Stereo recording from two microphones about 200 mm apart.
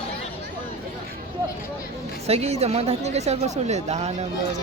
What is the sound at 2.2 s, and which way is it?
Speech, 30° right (ahead or behind).